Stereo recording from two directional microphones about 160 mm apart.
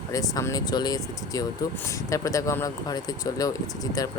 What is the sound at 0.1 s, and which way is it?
Speech, 20° left (ahead or behind).